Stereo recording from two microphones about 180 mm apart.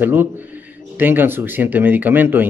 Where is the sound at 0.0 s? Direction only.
10° right (ahead or behind).